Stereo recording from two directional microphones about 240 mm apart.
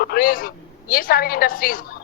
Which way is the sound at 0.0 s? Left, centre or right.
Left.